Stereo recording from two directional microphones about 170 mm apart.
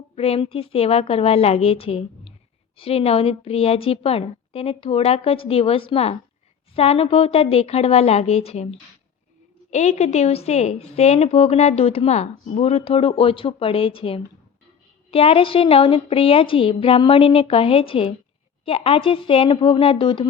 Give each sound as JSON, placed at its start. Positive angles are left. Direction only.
{"t": 0.2, "sound": "a woman's voice", "side_deg": 35}